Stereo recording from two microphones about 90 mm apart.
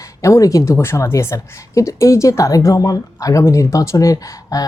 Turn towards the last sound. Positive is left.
turn(degrees=40)  # may be behind; listen again after turning